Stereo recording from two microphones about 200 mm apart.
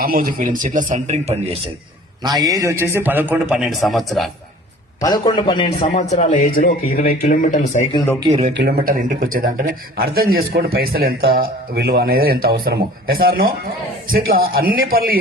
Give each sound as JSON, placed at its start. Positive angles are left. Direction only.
{"t": 0.0, "sound": "speech", "side_deg": -45}
{"t": 2.2, "sound": "a man's voice", "side_deg": -20}
{"t": 4.9, "sound": "a man's voice", "side_deg": 20}
{"t": 8.3, "sound": "speech", "side_deg": -35}
{"t": 8.5, "sound": "a man's voice", "side_deg": -50}